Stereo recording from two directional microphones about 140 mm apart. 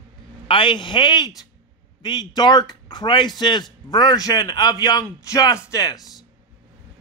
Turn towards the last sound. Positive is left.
turn(degrees=25)  # may be behind; listen again after turning